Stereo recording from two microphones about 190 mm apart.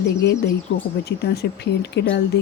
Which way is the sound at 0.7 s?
90° left.